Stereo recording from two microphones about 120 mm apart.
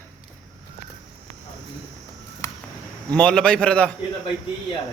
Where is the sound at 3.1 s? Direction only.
5° left (ahead or behind).